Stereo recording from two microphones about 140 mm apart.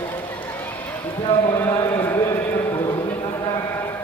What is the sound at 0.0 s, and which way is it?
Run, 15° left (ahead or behind).